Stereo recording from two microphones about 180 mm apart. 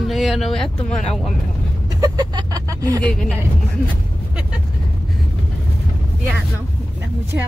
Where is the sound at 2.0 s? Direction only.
20° right (ahead or behind).